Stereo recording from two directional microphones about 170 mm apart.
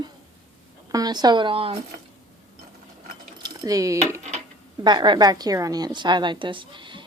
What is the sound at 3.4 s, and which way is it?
A woman's voice, 20° right (ahead or behind).